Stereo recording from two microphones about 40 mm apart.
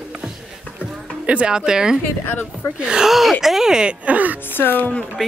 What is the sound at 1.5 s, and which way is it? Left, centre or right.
Speech, centre.